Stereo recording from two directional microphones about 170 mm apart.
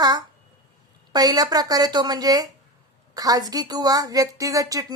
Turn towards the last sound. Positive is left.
turn(degrees=-20)  # may be behind; listen again after turning